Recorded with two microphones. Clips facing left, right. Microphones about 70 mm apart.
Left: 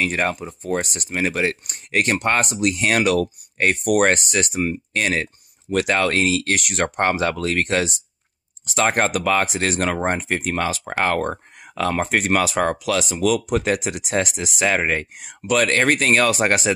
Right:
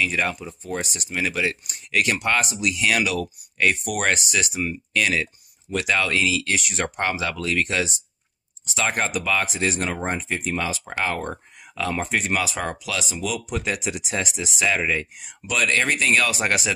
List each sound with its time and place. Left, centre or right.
0.0 s speech: left